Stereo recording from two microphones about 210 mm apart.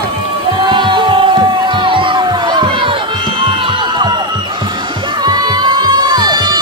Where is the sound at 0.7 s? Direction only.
20° right (ahead or behind).